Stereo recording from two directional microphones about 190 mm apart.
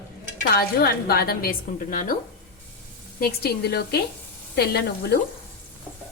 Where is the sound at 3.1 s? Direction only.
55° left (ahead or behind).